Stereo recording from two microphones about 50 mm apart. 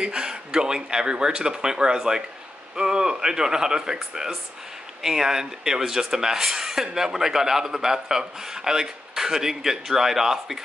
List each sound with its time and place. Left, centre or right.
0.0 s speech: centre